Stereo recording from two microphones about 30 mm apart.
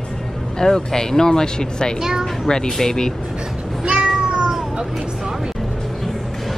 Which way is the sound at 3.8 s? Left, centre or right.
Right.